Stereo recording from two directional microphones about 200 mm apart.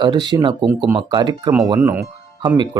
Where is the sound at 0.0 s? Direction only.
20° right (ahead or behind).